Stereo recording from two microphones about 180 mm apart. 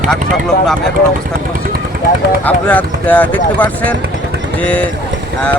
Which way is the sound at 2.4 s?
10° left (ahead or behind).